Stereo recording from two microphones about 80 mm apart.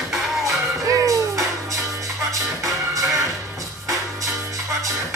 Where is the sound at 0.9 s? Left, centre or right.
Right.